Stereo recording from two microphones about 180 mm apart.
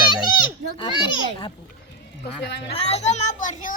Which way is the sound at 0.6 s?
70° right (ahead or behind).